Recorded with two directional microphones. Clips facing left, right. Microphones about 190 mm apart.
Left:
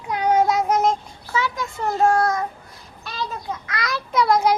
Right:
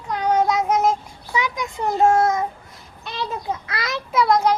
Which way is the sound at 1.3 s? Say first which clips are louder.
Even; 15° right (ahead or behind).